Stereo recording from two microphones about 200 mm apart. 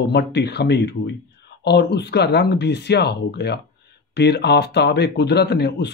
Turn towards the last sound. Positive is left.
turn(degrees=55)  # may be behind; listen again after turning